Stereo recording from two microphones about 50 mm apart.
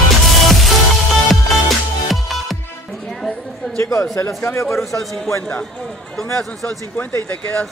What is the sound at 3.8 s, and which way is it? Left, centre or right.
Speech, left.